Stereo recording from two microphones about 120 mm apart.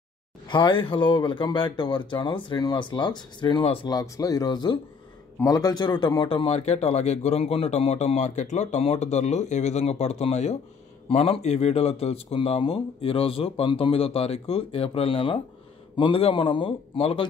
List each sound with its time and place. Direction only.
0.5 s speech: 40° left (ahead or behind)